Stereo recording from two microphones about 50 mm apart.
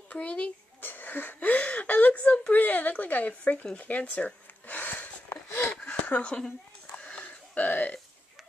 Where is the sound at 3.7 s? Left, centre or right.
Left.